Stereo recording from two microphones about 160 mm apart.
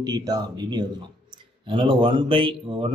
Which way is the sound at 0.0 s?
25° right (ahead or behind).